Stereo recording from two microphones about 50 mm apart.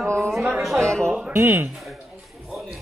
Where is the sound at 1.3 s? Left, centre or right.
Right.